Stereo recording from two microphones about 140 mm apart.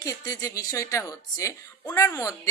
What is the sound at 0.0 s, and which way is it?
Speech, 25° left (ahead or behind).